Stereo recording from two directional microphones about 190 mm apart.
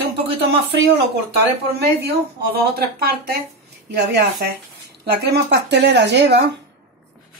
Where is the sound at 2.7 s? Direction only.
55° right (ahead or behind).